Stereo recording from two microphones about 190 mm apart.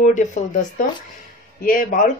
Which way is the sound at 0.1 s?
40° left (ahead or behind).